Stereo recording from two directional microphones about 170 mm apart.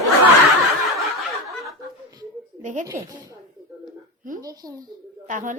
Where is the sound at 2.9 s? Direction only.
20° right (ahead or behind).